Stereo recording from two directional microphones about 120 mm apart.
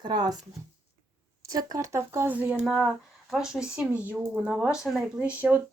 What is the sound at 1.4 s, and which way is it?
Speech, 30° right (ahead or behind).